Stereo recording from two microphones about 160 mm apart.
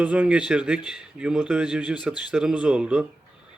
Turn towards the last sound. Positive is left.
turn(degrees=-5)  # may be behind; listen again after turning